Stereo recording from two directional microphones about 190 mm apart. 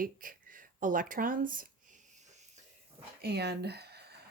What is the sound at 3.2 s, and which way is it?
Speech, 60° right (ahead or behind).